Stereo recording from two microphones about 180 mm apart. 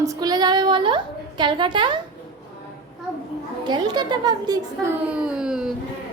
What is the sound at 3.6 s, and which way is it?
A woman's voice, 25° right (ahead or behind).